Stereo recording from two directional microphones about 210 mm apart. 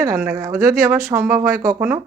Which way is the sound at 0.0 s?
15° right (ahead or behind).